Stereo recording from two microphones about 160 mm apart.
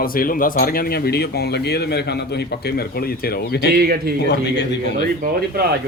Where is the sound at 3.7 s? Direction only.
75° right (ahead or behind).